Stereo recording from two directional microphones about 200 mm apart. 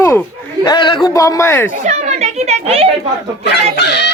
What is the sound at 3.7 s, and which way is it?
Chicken, 60° left (ahead or behind).